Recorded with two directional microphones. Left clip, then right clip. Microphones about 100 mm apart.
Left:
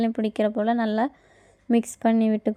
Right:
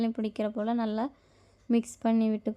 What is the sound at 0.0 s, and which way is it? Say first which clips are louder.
A woman's voice: left 7 dB; 35° left (ahead or behind).